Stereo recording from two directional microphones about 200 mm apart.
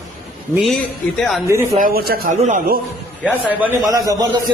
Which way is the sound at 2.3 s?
35° right (ahead or behind).